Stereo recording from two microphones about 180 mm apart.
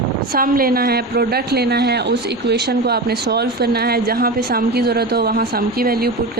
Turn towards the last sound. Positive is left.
turn(degrees=-55)  # may be behind; listen again after turning